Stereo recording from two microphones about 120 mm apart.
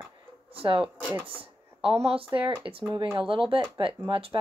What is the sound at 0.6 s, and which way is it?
Speech, 50° right (ahead or behind).